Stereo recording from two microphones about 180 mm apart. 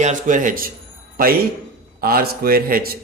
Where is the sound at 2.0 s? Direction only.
55° right (ahead or behind).